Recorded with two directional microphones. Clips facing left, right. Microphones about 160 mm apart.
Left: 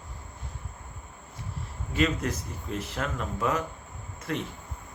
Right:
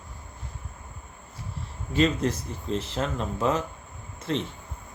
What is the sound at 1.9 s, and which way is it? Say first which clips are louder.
Speech: right 4 dB; 30° right (ahead or behind).